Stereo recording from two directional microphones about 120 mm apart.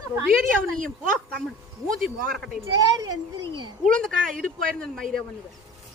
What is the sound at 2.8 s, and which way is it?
Speech, 35° right (ahead or behind).